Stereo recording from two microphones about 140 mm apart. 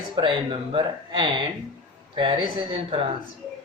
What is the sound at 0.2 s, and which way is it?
Speech, 35° right (ahead or behind).